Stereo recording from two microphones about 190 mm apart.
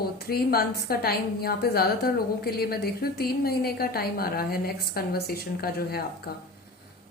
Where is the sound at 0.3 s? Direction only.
55° left (ahead or behind).